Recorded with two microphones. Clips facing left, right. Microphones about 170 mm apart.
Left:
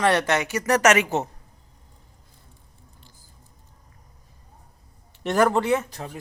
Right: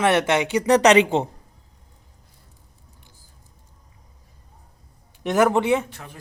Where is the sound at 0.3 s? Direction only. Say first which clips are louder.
Right 4 dB; 15° right (ahead or behind).